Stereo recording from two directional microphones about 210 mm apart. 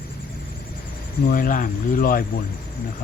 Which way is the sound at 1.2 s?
40° left (ahead or behind).